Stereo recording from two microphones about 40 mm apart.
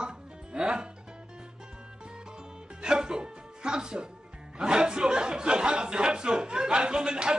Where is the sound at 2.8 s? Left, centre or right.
Centre.